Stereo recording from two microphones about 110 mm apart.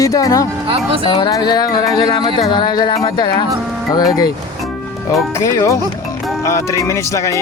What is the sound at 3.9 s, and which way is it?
Speech, 35° left (ahead or behind).